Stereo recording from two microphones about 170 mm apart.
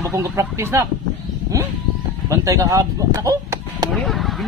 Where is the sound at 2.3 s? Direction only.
20° right (ahead or behind).